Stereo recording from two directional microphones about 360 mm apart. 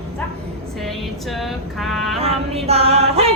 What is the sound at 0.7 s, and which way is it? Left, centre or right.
Female singing, centre.